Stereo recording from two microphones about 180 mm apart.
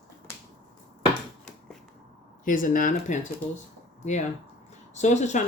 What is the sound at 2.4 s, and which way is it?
Speech, 50° left (ahead or behind).